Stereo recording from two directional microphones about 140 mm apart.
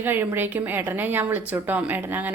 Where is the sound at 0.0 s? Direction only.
15° right (ahead or behind).